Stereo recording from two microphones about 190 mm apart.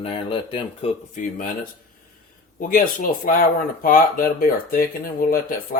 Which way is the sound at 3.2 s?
45° left (ahead or behind).